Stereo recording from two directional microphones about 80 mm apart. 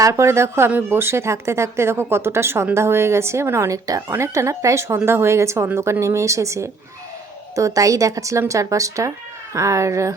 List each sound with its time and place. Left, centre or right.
0.0 s speech: right